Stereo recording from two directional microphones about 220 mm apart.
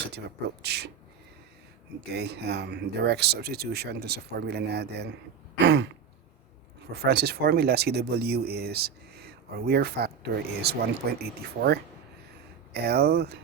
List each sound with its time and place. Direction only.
0.1 s speech: 50° right (ahead or behind)
2.1 s speech: 50° right (ahead or behind)
6.9 s speech: 45° right (ahead or behind)